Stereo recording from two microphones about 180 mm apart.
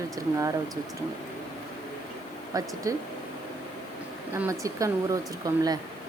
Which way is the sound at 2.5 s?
20° right (ahead or behind).